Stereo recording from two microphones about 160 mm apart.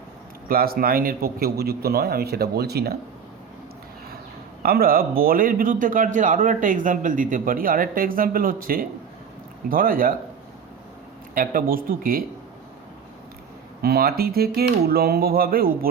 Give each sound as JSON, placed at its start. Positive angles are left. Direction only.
{"t": 0.4, "sound": "a man's voice", "side_deg": -70}
{"t": 4.6, "sound": "a man's voice", "side_deg": -70}
{"t": 11.3, "sound": "a man's voice", "side_deg": -65}
{"t": 13.8, "sound": "a man's voice", "side_deg": -75}